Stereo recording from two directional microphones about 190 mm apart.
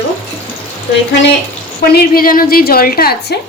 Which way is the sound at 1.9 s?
50° left (ahead or behind).